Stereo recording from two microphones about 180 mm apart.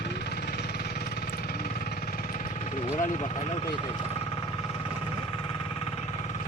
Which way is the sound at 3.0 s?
40° left (ahead or behind).